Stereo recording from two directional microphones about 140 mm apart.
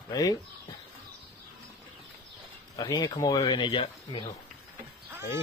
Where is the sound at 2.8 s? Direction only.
30° left (ahead or behind).